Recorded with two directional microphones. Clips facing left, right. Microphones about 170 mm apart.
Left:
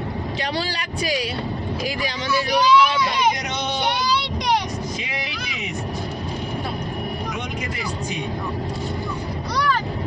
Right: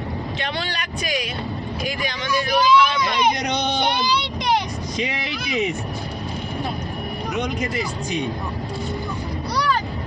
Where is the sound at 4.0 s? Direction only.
Centre (ahead or behind).